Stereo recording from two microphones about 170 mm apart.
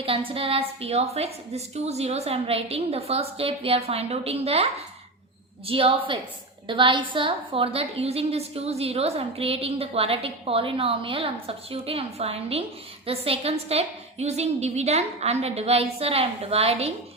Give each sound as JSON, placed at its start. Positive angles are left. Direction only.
{"t": 0.0, "sound": "a woman's voice", "side_deg": -35}